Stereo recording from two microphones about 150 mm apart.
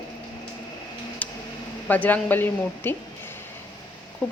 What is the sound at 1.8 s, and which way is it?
A woman's voice, 10° left (ahead or behind).